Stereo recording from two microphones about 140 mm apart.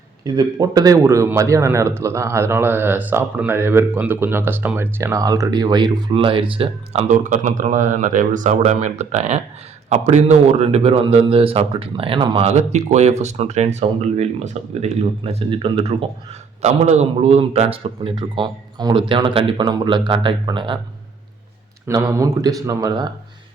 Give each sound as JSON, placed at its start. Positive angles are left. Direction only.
{"t": 0.3, "sound": "speech", "side_deg": -25}
{"t": 7.1, "sound": "a man's voice", "side_deg": -65}
{"t": 15.2, "sound": "speech", "side_deg": -45}
{"t": 16.6, "sound": "speech", "side_deg": -55}
{"t": 21.8, "sound": "speech", "side_deg": -25}